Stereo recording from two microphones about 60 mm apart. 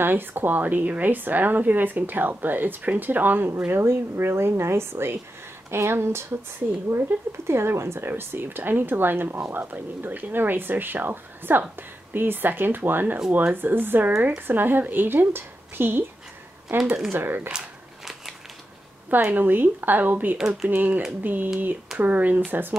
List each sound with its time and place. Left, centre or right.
0.0 s speech: right
16.6 s speech: centre
17.1 s speech: right
17.5 s a sound: centre
19.0 s speech: right